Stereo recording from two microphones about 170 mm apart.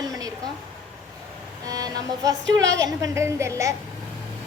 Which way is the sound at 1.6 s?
20° right (ahead or behind).